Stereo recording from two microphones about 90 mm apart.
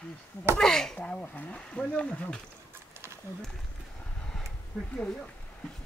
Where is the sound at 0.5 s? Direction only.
5° left (ahead or behind).